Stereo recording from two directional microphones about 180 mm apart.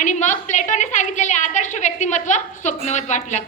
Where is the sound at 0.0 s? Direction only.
40° left (ahead or behind).